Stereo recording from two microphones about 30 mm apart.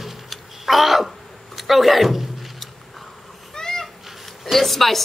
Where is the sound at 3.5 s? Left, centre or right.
Left.